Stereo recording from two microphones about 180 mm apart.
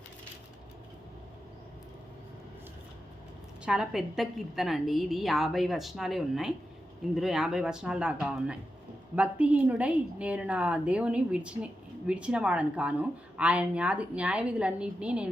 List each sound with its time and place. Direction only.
3.7 s a woman's voice: 5° right (ahead or behind)